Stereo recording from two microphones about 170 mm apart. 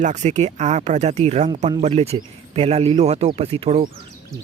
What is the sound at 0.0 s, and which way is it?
Speech, 45° right (ahead or behind).